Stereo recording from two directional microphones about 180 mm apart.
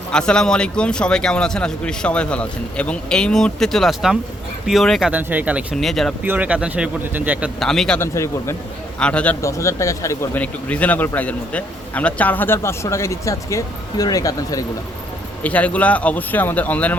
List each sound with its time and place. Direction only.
0.1 s speech: 5° left (ahead or behind)
6.2 s speech: 10° right (ahead or behind)
7.6 s speech: centre (ahead or behind)
8.0 s a man's voice: 15° left (ahead or behind)
15.4 s a man's voice: 10° left (ahead or behind)